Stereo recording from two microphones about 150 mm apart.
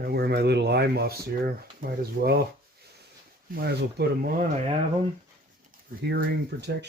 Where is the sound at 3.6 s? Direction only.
90° right.